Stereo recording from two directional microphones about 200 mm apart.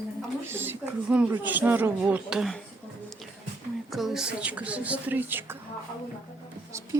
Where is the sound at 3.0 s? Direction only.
Centre (ahead or behind).